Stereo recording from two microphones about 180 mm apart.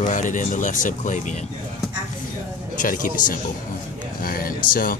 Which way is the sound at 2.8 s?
50° left (ahead or behind).